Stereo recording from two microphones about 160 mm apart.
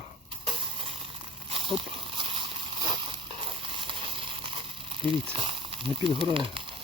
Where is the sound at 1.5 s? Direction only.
35° right (ahead or behind).